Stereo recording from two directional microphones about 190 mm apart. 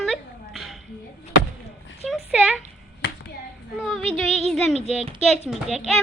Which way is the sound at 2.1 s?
5° right (ahead or behind).